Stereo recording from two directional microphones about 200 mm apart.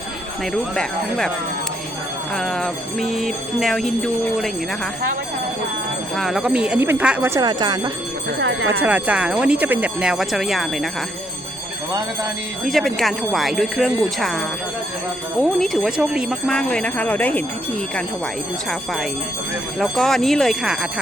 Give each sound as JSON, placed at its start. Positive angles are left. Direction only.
{"t": 0.5, "sound": "jingle bell", "side_deg": 0}
{"t": 2.3, "sound": "jingle bell", "side_deg": 0}
{"t": 6.1, "sound": "speech", "side_deg": 0}
{"t": 8.4, "sound": "speech", "side_deg": -60}
{"t": 8.8, "sound": "jingle bell", "side_deg": -5}
{"t": 12.6, "sound": "jingle bell", "side_deg": 0}
{"t": 19.8, "sound": "jingle bell", "side_deg": 0}